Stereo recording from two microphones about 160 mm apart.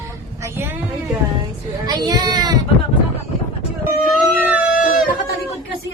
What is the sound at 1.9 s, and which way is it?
Speech, 25° right (ahead or behind).